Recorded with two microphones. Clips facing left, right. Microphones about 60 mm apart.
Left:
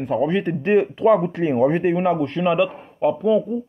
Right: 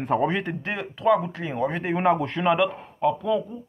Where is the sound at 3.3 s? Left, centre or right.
Centre.